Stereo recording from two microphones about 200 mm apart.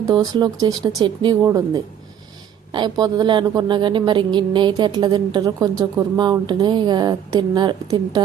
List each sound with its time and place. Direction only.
0.1 s a woman's voice: 20° right (ahead or behind)